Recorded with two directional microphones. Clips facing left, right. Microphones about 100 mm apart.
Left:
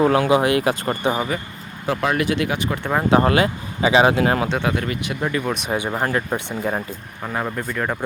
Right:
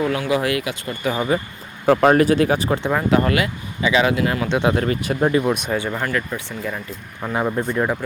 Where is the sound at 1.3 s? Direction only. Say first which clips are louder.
Right 5 dB; 30° right (ahead or behind).